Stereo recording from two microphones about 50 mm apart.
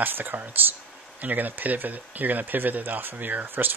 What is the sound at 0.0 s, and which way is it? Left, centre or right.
Speech, right.